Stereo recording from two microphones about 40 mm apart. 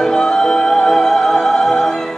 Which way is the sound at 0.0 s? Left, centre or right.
Centre.